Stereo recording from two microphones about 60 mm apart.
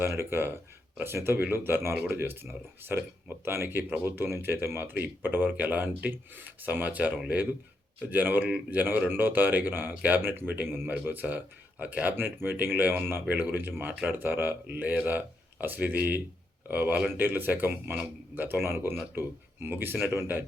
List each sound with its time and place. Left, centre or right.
0.1 s speech: right
8.1 s speech: right
8.4 s speech: right
8.8 s speech: right
12.1 s speech: right